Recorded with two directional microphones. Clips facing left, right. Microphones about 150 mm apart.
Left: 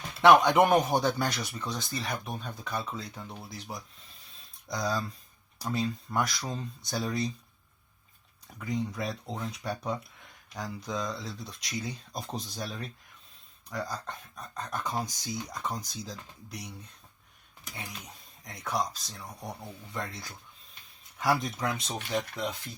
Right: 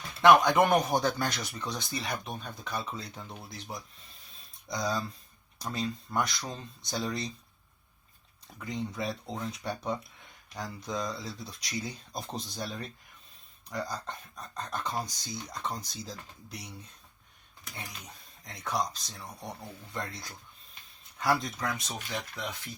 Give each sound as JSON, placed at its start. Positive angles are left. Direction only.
{"t": 0.2, "sound": "speech", "side_deg": 15}
{"t": 2.7, "sound": "speech", "side_deg": 0}
{"t": 8.4, "sound": "speech", "side_deg": 5}
{"t": 17.7, "sound": "speech", "side_deg": 5}
{"t": 21.2, "sound": "speech", "side_deg": 15}